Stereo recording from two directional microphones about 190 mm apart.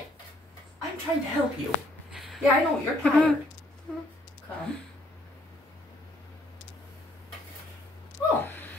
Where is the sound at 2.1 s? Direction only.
Centre (ahead or behind).